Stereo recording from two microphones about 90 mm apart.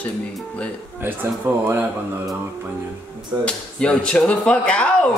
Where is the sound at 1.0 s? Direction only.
25° right (ahead or behind).